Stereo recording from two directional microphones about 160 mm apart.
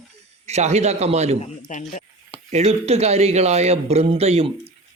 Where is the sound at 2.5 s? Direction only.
45° right (ahead or behind).